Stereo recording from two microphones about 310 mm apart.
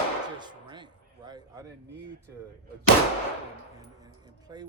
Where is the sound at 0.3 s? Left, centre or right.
Centre.